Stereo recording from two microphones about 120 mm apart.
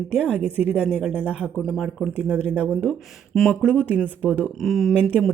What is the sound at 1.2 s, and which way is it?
Speech, 15° left (ahead or behind).